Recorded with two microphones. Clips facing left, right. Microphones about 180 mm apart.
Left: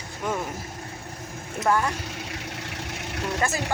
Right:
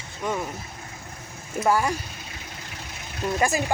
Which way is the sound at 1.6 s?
10° right (ahead or behind).